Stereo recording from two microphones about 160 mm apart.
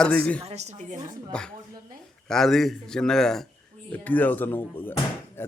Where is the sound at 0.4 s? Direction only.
45° right (ahead or behind).